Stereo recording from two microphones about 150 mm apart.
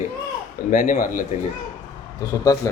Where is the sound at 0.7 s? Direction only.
65° left (ahead or behind).